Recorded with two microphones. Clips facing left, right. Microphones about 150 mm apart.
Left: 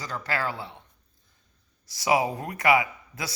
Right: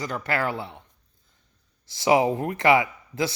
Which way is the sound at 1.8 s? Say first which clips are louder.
Right 4 dB; 25° right (ahead or behind).